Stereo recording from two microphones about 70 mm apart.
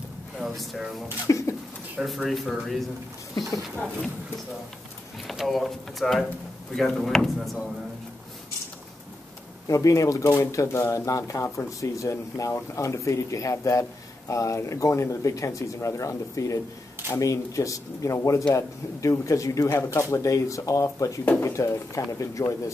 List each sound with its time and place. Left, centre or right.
0.4 s speech: centre
1.2 s speech: left
2.0 s speech: centre
5.3 s speech: centre
9.7 s speech: left